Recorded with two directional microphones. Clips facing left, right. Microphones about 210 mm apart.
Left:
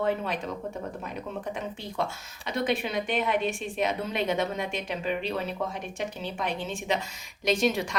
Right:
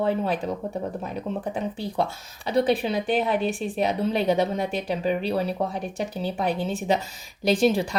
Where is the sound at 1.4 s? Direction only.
35° right (ahead or behind).